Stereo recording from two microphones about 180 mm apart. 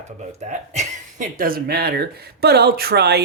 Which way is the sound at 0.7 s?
45° right (ahead or behind).